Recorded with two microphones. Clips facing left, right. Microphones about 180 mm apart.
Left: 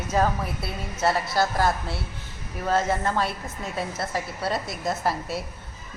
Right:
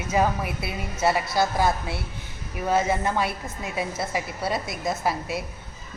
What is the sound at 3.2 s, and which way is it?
A woman's voice, 5° right (ahead or behind).